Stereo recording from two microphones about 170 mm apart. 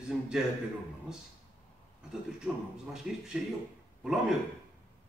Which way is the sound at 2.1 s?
5° right (ahead or behind).